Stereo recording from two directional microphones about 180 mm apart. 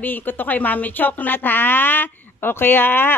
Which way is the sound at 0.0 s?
10° left (ahead or behind).